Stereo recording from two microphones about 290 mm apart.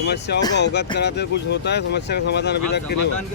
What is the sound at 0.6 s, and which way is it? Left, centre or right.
Speech, left.